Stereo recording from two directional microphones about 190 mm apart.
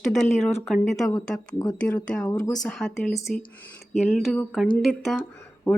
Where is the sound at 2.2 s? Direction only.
20° left (ahead or behind).